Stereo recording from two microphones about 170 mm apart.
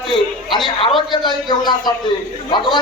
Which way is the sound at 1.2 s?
25° left (ahead or behind).